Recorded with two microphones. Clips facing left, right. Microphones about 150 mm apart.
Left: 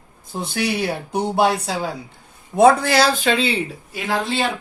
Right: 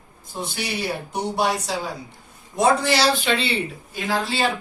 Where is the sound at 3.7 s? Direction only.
75° left (ahead or behind).